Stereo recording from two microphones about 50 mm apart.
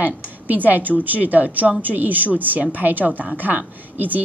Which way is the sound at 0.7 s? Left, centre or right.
Right.